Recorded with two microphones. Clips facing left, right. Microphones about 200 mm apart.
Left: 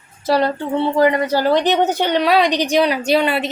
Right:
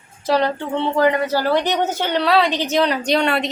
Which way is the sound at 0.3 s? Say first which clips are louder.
Left 2 dB; 10° left (ahead or behind).